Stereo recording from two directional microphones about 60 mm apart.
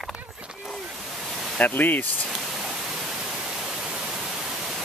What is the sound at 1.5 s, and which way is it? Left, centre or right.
Speech, left.